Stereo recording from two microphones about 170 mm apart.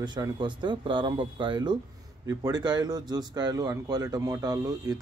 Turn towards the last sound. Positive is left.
turn(degrees=-25)  # may be behind; listen again after turning